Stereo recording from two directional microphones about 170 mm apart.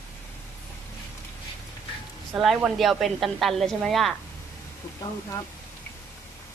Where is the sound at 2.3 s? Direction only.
5° right (ahead or behind).